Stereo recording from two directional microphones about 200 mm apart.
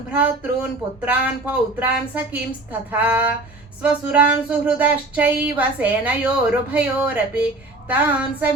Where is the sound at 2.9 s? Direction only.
10° right (ahead or behind).